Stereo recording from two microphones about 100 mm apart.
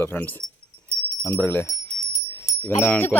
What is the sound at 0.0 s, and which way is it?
Speech, 20° left (ahead or behind).